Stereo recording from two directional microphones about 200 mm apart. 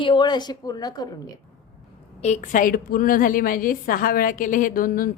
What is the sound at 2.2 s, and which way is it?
A woman's voice, 35° left (ahead or behind).